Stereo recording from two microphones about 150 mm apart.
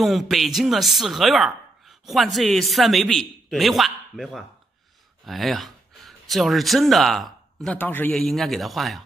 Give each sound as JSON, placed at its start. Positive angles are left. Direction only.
{"t": 0.0, "sound": "a woman's voice", "side_deg": 0}